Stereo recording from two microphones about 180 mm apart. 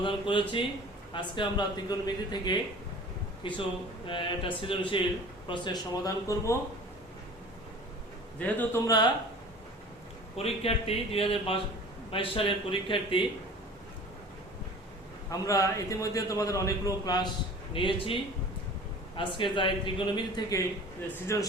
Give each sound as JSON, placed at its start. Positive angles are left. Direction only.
{"t": 0.0, "sound": "a man's voice", "side_deg": 30}
{"t": 8.4, "sound": "a man's voice", "side_deg": 10}
{"t": 10.3, "sound": "a man's voice", "side_deg": 35}
{"t": 15.3, "sound": "a man's voice", "side_deg": 15}
{"t": 19.4, "sound": "a man's voice", "side_deg": 25}